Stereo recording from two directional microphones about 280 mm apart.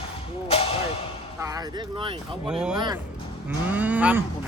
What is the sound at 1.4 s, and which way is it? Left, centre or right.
Speech, centre.